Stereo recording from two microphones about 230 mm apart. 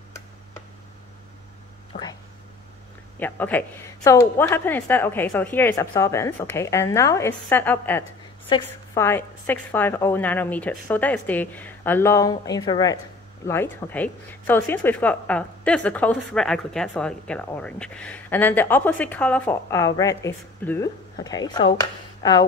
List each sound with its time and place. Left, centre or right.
1.9 s speech: left
3.2 s a woman's voice: centre